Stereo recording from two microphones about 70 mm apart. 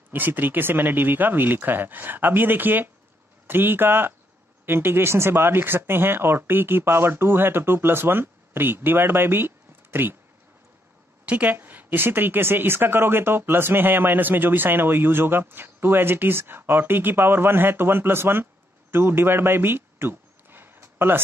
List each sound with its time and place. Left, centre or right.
0.1 s speech: right
11.2 s a woman's voice: centre